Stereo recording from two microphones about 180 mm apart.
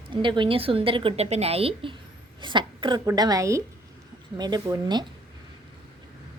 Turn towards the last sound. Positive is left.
turn(degrees=-25)  # may be behind; listen again after turning